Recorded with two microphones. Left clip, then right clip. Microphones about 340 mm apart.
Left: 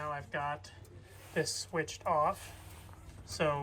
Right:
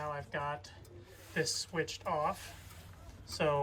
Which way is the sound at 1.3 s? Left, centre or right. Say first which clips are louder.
Left 1 dB; centre.